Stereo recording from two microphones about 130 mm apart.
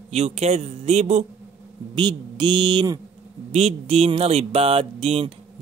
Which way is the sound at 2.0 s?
35° right (ahead or behind).